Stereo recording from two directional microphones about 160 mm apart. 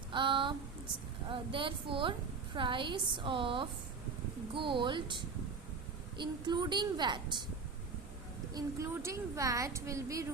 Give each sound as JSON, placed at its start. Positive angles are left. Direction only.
{"t": 0.1, "sound": "a sound", "side_deg": -30}
{"t": 1.3, "sound": "a woman's voice", "side_deg": -35}
{"t": 8.5, "sound": "a woman's voice", "side_deg": -20}